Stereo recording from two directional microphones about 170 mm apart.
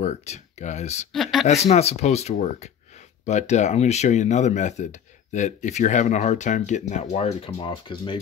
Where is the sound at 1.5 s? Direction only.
40° left (ahead or behind).